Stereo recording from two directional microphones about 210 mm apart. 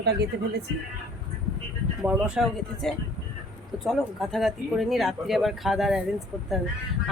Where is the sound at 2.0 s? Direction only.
5° right (ahead or behind).